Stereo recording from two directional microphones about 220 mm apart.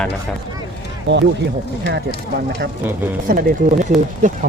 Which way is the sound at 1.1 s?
50° right (ahead or behind).